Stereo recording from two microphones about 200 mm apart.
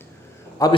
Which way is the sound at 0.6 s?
15° left (ahead or behind).